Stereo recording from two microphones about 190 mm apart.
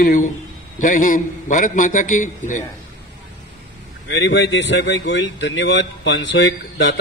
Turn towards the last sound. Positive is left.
turn(degrees=70)  # may be behind; listen again after turning